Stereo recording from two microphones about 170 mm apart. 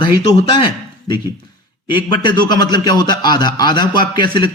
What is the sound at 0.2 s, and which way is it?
A man's voice, 35° left (ahead or behind).